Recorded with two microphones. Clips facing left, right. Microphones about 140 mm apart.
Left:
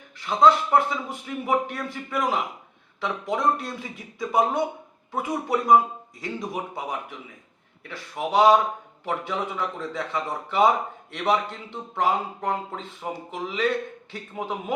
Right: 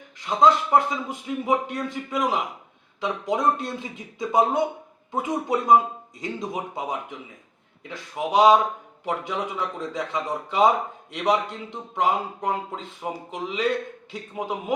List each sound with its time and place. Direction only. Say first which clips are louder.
0.2 s a man's voice: even; 20° right (ahead or behind)
7.9 s speech: right 1 dB; 15° right (ahead or behind)